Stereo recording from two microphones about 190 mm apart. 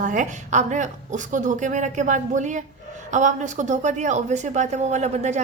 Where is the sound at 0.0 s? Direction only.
40° right (ahead or behind).